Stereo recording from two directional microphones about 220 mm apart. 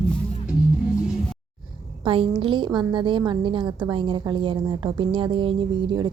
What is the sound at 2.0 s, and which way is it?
A woman's voice, 25° right (ahead or behind).